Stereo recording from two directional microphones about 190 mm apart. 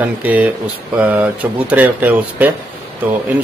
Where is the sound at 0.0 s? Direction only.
10° right (ahead or behind).